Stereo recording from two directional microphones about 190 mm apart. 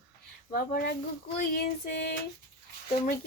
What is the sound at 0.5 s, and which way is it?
Speech, 50° left (ahead or behind).